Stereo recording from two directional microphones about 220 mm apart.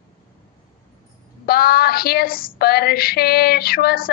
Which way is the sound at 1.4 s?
45° left (ahead or behind).